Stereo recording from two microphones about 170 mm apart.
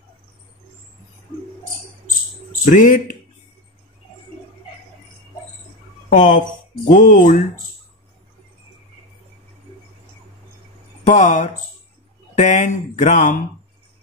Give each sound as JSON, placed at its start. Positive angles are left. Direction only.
{"t": 2.6, "sound": "speech", "side_deg": 50}
{"t": 6.1, "sound": "speech", "side_deg": 50}
{"t": 11.1, "sound": "speech", "side_deg": 45}